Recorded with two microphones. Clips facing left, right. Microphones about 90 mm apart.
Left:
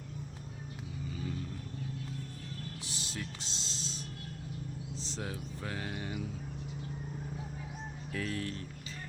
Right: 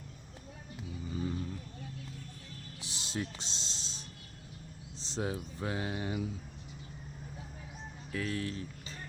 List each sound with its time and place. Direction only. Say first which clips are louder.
1.1 s vehicle: right 5 dB; 30° right (ahead or behind)
2.8 s music: right 3 dB; 20° right (ahead or behind)
5.0 s speech: right 7 dB; 20° right (ahead or behind)
8.1 s speech: right 1 dB; centre (ahead or behind)